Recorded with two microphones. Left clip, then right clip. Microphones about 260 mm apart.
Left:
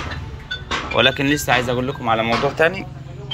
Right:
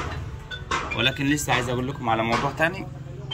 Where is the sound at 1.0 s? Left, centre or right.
Centre.